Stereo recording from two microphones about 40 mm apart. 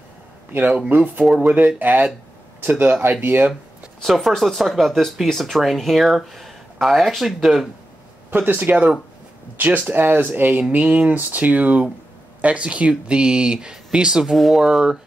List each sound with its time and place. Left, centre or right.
0.8 s speech: right
4.0 s speech: centre
8.3 s speech: right
8.5 s speech: right
10.6 s speech: right; by 14.3 s centre
14.3 s speech: centre
14.6 s speech: centre